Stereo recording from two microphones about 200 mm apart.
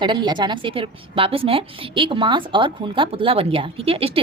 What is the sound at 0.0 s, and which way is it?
A woman's voice, 20° right (ahead or behind).